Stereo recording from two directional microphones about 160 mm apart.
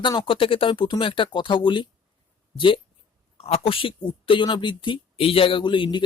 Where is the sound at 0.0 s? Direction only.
30° left (ahead or behind).